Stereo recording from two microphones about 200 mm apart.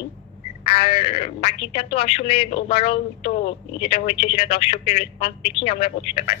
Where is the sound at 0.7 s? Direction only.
30° left (ahead or behind).